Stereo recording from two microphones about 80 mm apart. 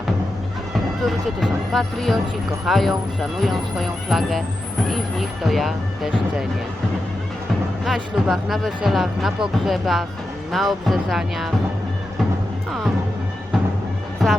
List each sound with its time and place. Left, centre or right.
1.0 s speech: centre
7.9 s speech: centre
14.2 s music: centre